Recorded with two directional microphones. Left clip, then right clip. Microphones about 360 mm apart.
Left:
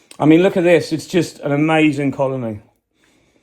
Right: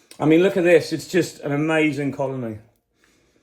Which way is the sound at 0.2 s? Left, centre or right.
Centre.